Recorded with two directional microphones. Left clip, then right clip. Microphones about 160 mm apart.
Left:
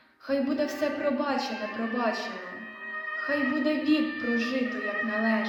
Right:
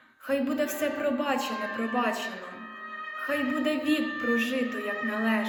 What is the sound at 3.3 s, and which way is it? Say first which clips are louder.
Speech: even; 15° right (ahead or behind).